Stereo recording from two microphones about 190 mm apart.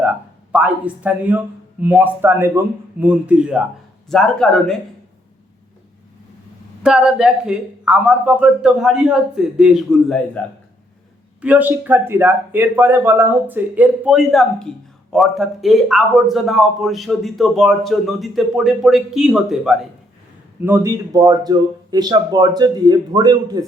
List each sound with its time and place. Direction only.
0.0 s a sound: 5° right (ahead or behind)
1.8 s a man's voice: 10° right (ahead or behind)
6.8 s a man's voice: 5° right (ahead or behind)
11.3 s a man's voice: 5° right (ahead or behind)